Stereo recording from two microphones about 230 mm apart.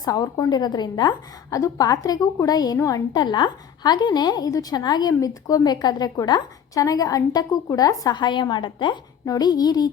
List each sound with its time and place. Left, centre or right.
0.0 s a woman's voice: centre